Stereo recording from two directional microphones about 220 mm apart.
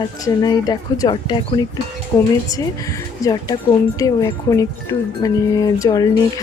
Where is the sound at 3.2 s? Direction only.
15° left (ahead or behind).